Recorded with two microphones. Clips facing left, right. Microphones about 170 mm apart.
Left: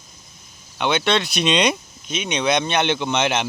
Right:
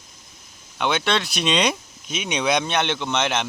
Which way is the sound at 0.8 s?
5° right (ahead or behind).